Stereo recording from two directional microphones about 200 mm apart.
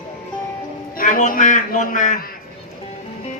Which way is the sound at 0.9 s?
40° left (ahead or behind).